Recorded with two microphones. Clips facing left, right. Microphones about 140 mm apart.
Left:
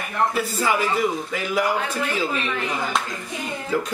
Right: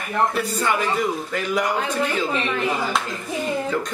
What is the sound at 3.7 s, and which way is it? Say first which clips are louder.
Speech: left 1 dB; 5° left (ahead or behind).